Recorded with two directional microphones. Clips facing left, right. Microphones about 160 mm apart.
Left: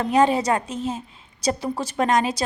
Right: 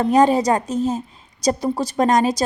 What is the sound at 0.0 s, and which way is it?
A woman's voice, 40° right (ahead or behind).